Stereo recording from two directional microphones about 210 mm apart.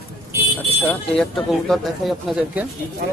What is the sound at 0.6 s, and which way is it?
Speech, 5° left (ahead or behind).